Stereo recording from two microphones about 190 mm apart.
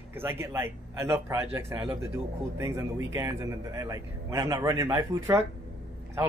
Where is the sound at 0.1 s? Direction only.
10° right (ahead or behind).